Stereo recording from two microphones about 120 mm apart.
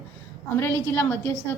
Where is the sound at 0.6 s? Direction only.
20° left (ahead or behind).